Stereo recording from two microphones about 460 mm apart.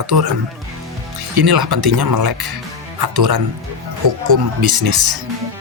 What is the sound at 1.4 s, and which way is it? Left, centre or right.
Speech, right.